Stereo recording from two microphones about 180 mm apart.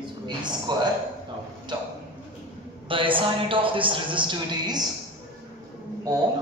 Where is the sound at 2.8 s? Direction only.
30° right (ahead or behind).